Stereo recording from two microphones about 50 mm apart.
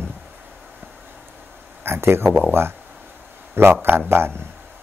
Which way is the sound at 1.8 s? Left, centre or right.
Right.